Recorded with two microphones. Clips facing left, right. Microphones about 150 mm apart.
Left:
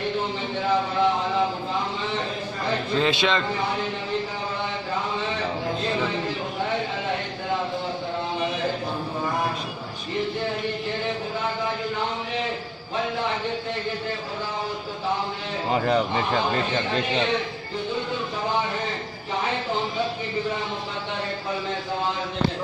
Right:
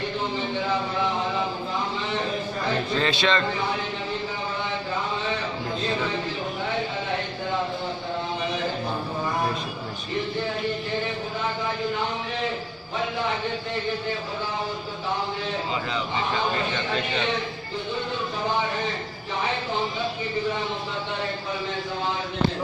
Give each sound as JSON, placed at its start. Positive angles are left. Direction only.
{"t": 3.0, "sound": "a man's voice", "side_deg": 15}
{"t": 15.7, "sound": "speech", "side_deg": 50}